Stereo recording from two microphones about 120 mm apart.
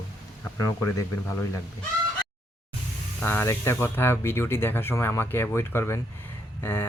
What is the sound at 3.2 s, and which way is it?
Speech, 20° left (ahead or behind).